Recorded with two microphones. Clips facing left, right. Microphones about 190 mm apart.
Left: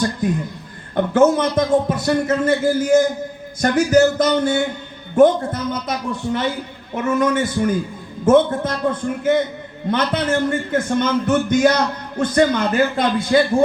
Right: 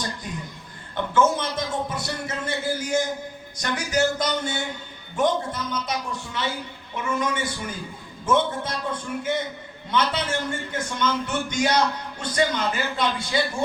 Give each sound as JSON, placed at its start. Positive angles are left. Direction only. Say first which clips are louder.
{"t": 0.9, "sound": "a man's voice", "louder": "left 7 dB", "side_deg": 55}